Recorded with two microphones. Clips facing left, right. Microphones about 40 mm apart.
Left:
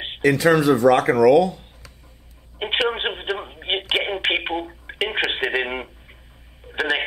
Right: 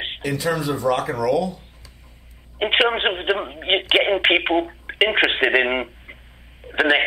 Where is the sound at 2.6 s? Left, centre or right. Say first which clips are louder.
Right 4 dB; right.